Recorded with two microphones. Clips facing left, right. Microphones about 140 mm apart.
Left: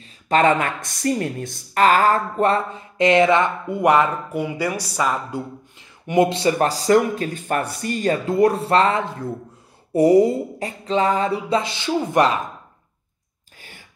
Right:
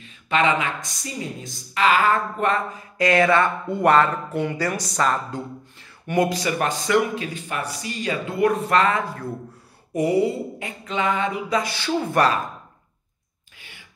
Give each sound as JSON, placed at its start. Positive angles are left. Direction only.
{"t": 0.0, "sound": "speech", "side_deg": 40}
{"t": 9.9, "sound": "speech", "side_deg": 40}
{"t": 13.6, "sound": "a sound", "side_deg": 45}